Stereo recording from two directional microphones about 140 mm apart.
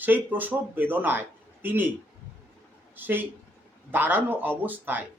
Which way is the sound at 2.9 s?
15° right (ahead or behind).